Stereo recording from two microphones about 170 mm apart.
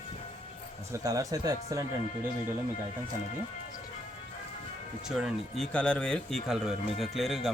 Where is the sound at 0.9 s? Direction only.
20° right (ahead or behind).